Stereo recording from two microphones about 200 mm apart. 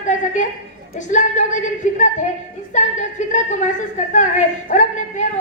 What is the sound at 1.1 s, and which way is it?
Speech, 35° left (ahead or behind).